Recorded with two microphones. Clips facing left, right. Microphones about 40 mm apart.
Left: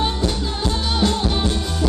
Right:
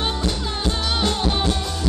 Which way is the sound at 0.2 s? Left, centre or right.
Centre.